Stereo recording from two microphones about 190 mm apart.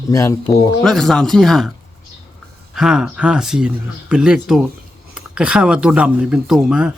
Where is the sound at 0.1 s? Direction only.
15° left (ahead or behind).